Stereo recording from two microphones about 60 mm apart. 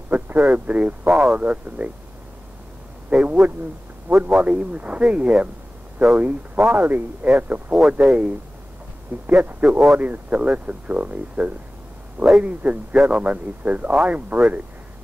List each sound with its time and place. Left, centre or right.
0.1 s speech: right
3.1 s speech: right
9.4 s speech: right